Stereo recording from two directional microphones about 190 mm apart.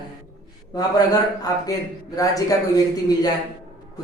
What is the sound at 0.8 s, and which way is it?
A woman's voice, 20° left (ahead or behind).